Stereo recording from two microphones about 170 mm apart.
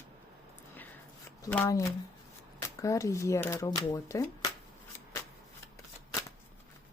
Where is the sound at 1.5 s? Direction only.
15° left (ahead or behind).